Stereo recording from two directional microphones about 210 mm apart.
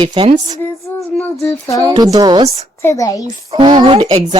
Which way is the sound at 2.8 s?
15° left (ahead or behind).